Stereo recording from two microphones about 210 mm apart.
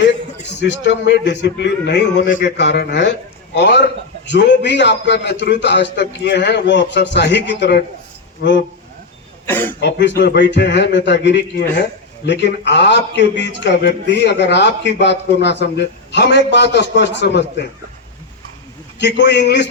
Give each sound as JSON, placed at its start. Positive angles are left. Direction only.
{"t": 0.6, "sound": "a man's voice", "side_deg": 55}
{"t": 9.5, "sound": "speech", "side_deg": 10}
{"t": 9.8, "sound": "a man's voice", "side_deg": 55}
{"t": 18.9, "sound": "a man's voice", "side_deg": 55}